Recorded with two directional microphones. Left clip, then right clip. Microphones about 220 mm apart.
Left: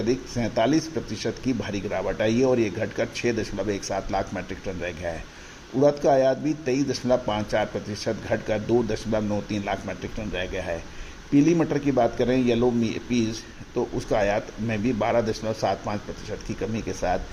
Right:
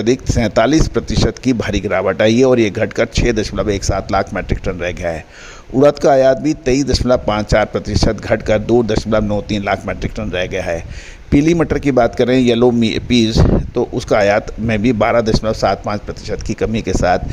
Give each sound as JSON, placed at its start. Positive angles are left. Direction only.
{"t": 0.0, "sound": "speech", "side_deg": -45}